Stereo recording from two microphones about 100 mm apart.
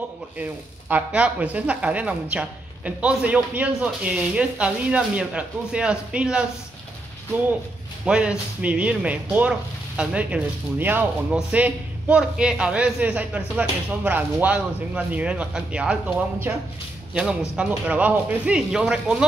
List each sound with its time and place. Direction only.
0.4 s speech: 15° right (ahead or behind)
8.0 s speech: 10° right (ahead or behind)
16.5 s speech: 20° right (ahead or behind)
17.1 s speech: 10° right (ahead or behind)